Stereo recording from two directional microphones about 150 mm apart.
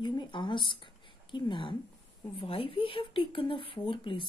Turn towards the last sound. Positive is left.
turn(degrees=35)  # may be behind; listen again after turning